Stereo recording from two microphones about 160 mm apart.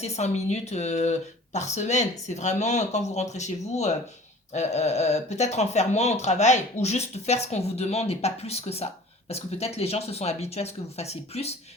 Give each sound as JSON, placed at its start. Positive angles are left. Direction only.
{"t": 0.0, "sound": "speech", "side_deg": 45}